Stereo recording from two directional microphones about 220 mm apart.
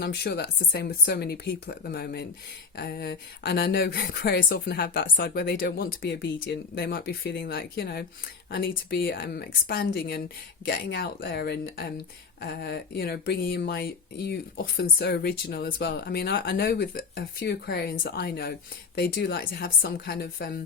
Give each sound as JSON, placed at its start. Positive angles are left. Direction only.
{"t": 0.0, "sound": "speech", "side_deg": 50}